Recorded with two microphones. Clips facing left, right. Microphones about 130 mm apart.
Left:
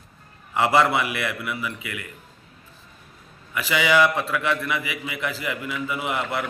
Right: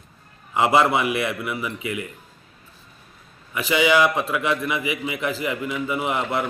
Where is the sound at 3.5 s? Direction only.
20° right (ahead or behind).